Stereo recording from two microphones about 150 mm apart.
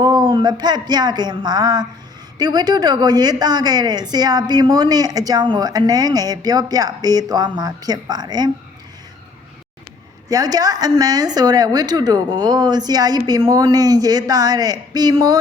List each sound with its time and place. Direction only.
0.0 s a woman's voice: 25° right (ahead or behind)
10.2 s a woman's voice: 25° right (ahead or behind)